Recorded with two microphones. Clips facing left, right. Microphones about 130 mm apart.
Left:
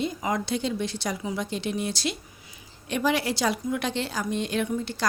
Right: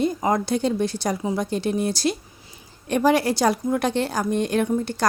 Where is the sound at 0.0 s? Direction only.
40° right (ahead or behind).